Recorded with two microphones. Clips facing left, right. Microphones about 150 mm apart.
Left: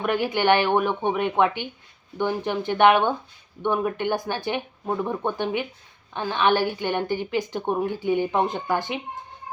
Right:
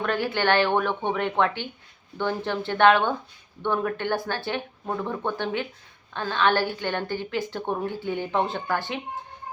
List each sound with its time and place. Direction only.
0.0 s a woman's voice: 15° left (ahead or behind)